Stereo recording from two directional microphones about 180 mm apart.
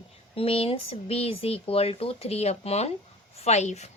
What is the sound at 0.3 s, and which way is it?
A woman's voice, 30° left (ahead or behind).